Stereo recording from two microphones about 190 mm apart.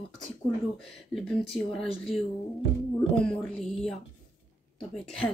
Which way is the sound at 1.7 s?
Centre (ahead or behind).